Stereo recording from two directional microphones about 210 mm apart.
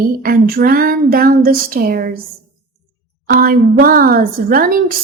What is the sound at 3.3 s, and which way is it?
A woman's voice, 45° right (ahead or behind).